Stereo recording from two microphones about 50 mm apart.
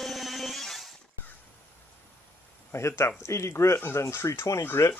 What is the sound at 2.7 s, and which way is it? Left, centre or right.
Speech, left.